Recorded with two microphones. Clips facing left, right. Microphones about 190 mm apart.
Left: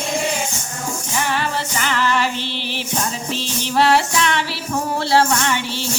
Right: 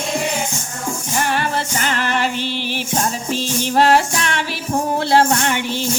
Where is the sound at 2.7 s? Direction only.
45° right (ahead or behind).